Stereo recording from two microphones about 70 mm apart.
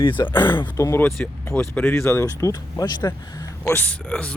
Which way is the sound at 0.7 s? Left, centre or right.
Left.